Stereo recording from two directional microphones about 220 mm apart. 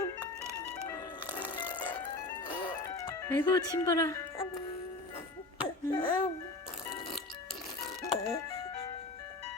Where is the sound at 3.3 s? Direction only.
10° left (ahead or behind).